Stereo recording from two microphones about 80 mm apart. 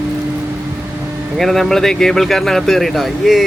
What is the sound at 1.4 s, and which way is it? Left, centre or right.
Speech, centre.